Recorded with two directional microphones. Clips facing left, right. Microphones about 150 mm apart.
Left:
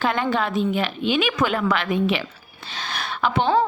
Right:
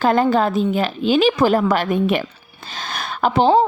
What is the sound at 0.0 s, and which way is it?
A woman's voice, 40° right (ahead or behind).